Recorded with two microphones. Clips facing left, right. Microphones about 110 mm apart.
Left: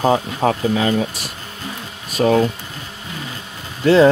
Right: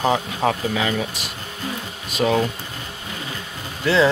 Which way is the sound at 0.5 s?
35° left (ahead or behind).